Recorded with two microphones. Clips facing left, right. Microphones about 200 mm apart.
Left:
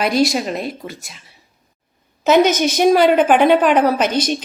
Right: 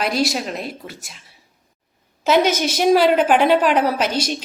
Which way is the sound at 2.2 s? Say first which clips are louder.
Left 4 dB; 50° left (ahead or behind).